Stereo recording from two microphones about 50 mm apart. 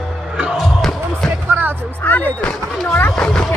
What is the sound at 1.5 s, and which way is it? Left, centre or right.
Music, right.